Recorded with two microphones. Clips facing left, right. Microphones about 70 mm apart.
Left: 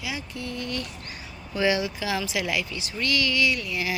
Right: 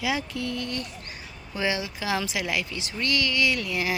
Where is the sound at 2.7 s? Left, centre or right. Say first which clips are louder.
Even; right.